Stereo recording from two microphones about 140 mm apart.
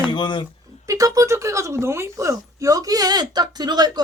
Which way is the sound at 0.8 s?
25° right (ahead or behind).